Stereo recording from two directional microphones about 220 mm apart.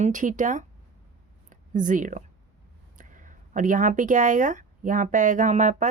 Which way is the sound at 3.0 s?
35° right (ahead or behind).